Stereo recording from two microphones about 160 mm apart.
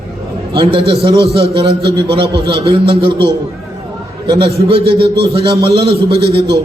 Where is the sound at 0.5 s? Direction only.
35° right (ahead or behind).